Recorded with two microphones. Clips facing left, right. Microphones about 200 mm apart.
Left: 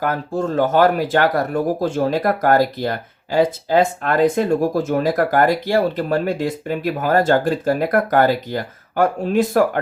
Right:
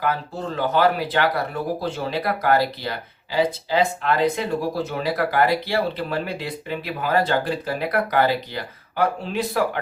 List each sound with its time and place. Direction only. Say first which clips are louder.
0.0 s speech: left 5 dB; 45° left (ahead or behind)